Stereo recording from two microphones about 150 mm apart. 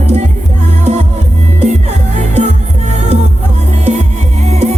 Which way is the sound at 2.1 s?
55° right (ahead or behind).